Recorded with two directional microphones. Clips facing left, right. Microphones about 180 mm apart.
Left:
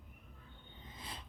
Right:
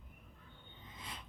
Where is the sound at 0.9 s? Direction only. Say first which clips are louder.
Left 1 dB; 35° left (ahead or behind).